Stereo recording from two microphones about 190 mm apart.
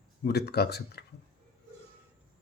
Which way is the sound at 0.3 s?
60° left (ahead or behind).